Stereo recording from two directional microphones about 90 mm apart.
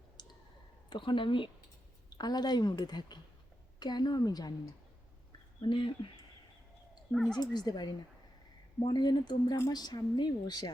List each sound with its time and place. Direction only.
0.9 s speech: 65° left (ahead or behind)
2.1 s a woman's voice: 50° left (ahead or behind)
5.6 s speech: 75° left (ahead or behind)
7.1 s speech: centre (ahead or behind)
7.3 s a woman's voice: 50° left (ahead or behind)
9.0 s a woman's voice: 50° left (ahead or behind)